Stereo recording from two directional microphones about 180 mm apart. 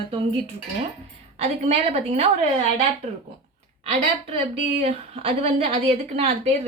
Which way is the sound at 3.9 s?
40° right (ahead or behind).